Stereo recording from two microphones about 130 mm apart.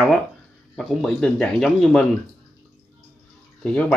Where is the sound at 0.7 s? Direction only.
Centre (ahead or behind).